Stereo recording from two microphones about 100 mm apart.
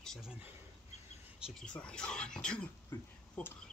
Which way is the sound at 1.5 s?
10° left (ahead or behind).